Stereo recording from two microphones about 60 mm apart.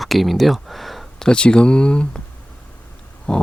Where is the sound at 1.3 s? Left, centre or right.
Centre.